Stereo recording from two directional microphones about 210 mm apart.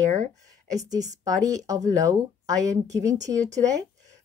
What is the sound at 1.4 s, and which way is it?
A woman's voice, 15° right (ahead or behind).